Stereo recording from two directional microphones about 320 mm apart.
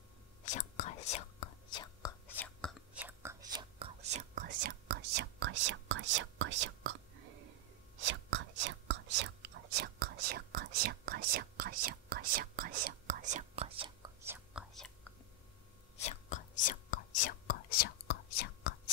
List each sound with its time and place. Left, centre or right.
0.5 s whispering: left; by 7.0 s right
8.0 s whispering: right; by 14.9 s centre
16.0 s whispering: left